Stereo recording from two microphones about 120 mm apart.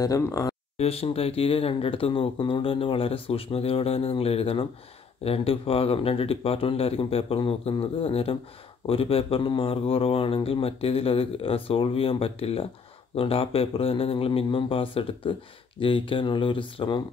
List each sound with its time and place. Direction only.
0.0 s speech: 30° left (ahead or behind)
0.7 s speech: 55° left (ahead or behind)